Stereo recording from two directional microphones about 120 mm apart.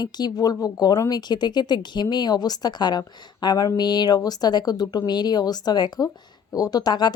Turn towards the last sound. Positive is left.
turn(degrees=35)  # may be behind; listen again after turning